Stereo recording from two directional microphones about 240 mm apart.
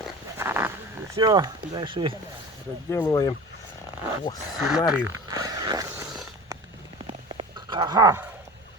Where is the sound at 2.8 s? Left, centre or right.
Centre.